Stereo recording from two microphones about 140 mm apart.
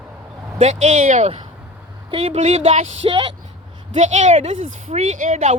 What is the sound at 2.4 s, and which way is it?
Speech, 60° right (ahead or behind).